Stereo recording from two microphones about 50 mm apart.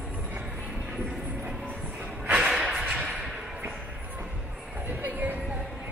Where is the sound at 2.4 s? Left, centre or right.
Centre.